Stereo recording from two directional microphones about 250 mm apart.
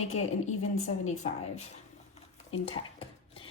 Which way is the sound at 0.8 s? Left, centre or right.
Left.